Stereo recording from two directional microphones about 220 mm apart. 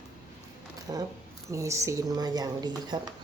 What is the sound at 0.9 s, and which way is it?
Speech, 15° right (ahead or behind).